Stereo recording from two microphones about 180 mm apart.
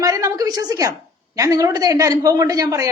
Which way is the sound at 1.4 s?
20° right (ahead or behind).